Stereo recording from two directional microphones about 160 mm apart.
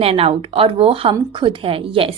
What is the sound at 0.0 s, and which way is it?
A woman's voice, 40° right (ahead or behind).